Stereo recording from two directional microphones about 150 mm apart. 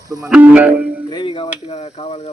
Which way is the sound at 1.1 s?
35° left (ahead or behind).